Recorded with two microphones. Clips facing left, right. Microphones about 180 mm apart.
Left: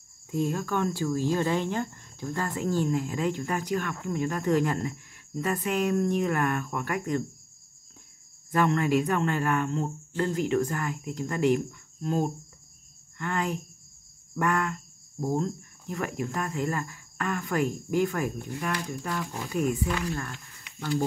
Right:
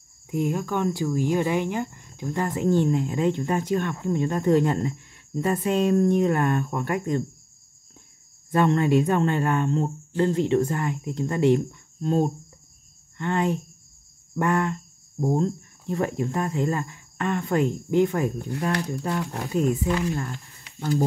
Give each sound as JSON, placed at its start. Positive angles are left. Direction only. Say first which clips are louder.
{"t": 0.3, "sound": "speech", "louder": "right 3 dB", "side_deg": -20}
{"t": 8.5, "sound": "speech", "louder": "right 4 dB", "side_deg": -30}